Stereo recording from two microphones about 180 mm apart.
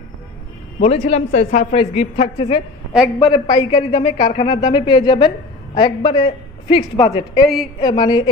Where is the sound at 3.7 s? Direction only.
30° left (ahead or behind).